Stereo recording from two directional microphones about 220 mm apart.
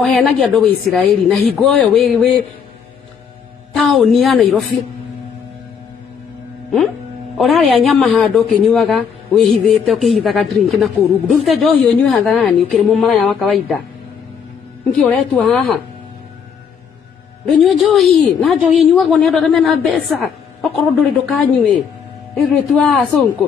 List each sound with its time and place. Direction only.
0.0 s speech: centre (ahead or behind)
3.7 s speech: centre (ahead or behind)
7.3 s speech: centre (ahead or behind)
14.9 s speech: 5° left (ahead or behind)
17.6 s speech: centre (ahead or behind)